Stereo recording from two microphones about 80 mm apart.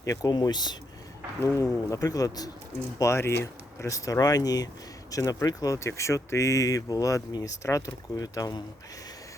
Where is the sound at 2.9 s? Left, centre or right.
Left.